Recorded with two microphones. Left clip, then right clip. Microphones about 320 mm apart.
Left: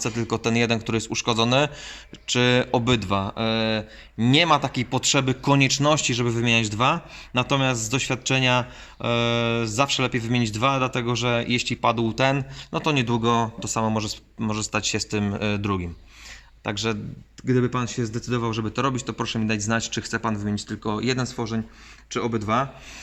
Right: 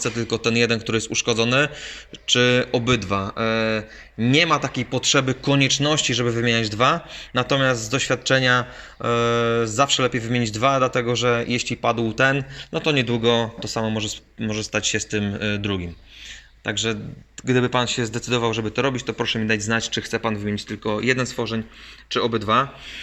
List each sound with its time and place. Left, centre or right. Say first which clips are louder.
0.0 s a man's voice: right 3 dB; centre
17.4 s a man's voice: right 4 dB; centre